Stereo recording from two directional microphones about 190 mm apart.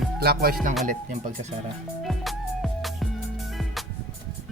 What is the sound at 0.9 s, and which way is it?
Speech, 40° right (ahead or behind).